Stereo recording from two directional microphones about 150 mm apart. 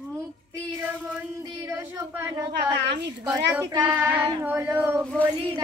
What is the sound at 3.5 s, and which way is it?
Female singing, 20° right (ahead or behind).